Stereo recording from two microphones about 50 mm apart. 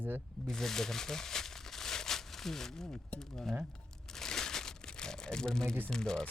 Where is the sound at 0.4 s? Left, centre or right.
Centre.